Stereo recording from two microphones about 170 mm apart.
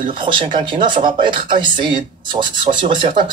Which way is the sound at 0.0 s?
30° right (ahead or behind).